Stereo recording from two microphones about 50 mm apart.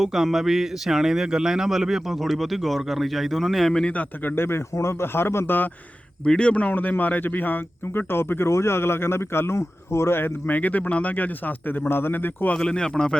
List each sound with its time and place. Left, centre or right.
0.0 s speech: centre
4.2 s speech: left
4.7 s speech: left
6.2 s speech: centre
6.7 s speech: left
9.6 s speech: left
10.5 s speech: left
12.5 s speech: centre